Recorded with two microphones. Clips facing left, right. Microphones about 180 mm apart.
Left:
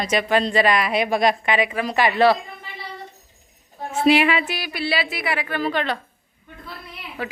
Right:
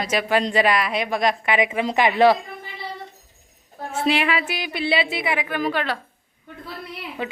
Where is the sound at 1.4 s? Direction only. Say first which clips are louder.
Right 1 dB; 15° right (ahead or behind).